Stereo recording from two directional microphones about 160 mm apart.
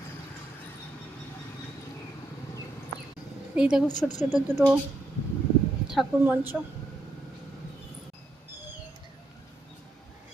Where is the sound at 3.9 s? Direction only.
25° left (ahead or behind).